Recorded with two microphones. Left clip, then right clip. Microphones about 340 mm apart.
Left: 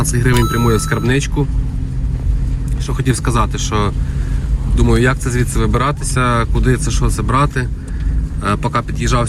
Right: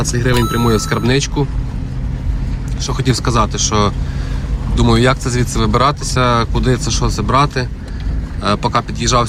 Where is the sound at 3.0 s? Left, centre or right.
Centre.